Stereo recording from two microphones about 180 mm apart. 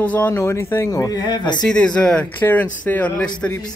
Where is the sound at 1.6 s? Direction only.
5° left (ahead or behind).